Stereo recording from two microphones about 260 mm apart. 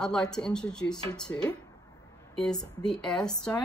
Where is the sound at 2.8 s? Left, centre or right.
Centre.